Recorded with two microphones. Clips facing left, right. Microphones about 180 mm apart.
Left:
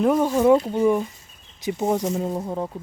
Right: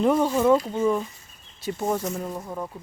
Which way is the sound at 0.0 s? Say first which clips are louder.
Left 2 dB; 5° left (ahead or behind).